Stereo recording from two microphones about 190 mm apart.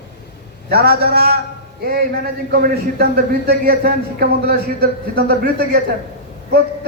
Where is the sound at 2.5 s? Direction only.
50° right (ahead or behind).